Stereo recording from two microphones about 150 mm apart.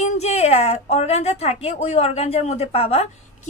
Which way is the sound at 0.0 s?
45° left (ahead or behind).